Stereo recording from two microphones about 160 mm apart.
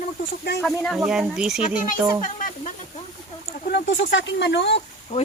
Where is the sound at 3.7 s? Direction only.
80° left.